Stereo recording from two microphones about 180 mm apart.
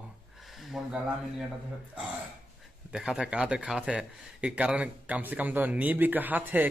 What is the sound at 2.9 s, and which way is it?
Speech, 5° right (ahead or behind).